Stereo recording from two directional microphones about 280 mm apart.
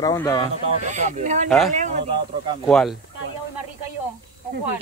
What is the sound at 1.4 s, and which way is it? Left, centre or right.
Speech, centre.